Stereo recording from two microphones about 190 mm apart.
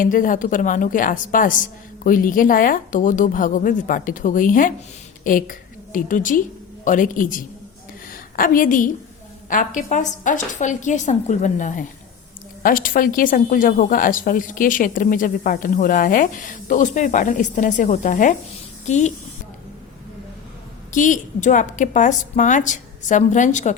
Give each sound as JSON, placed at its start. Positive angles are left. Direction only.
{"t": 0.0, "sound": "a woman's voice", "side_deg": 45}
{"t": 20.9, "sound": "a woman's voice", "side_deg": 40}